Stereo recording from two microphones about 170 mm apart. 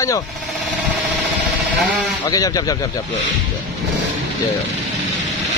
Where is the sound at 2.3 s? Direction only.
20° left (ahead or behind).